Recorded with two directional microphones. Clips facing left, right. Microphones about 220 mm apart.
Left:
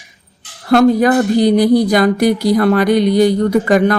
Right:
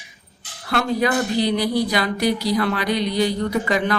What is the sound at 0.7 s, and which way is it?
Speech, 45° left (ahead or behind).